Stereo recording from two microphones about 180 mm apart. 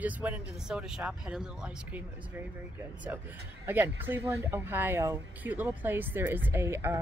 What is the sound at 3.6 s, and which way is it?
Speech, 10° right (ahead or behind).